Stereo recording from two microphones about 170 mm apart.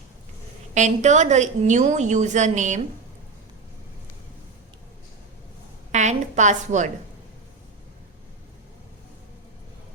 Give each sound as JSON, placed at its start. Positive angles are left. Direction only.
{"t": 0.7, "sound": "a woman's voice", "side_deg": -45}
{"t": 5.9, "sound": "a woman's voice", "side_deg": -45}